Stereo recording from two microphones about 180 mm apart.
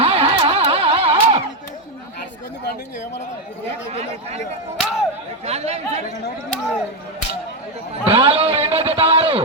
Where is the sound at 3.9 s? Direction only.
35° right (ahead or behind).